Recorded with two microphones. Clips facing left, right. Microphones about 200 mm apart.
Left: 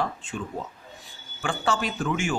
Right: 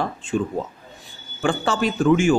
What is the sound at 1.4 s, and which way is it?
Speech, 30° right (ahead or behind).